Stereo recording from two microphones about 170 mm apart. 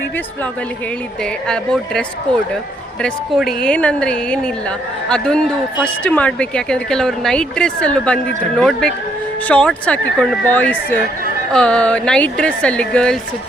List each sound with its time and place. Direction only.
1.2 s a woman's voice: 5° left (ahead or behind)